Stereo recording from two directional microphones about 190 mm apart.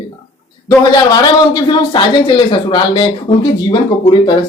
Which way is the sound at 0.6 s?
20° left (ahead or behind).